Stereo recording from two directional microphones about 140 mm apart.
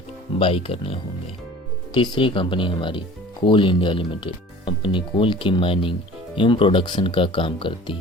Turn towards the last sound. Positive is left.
turn(degrees=40)  # may be behind; listen again after turning